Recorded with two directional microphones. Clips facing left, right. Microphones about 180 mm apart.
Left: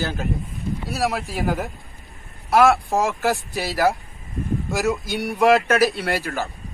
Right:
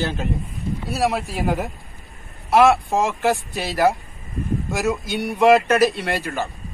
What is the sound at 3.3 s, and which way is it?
Speech, 20° right (ahead or behind).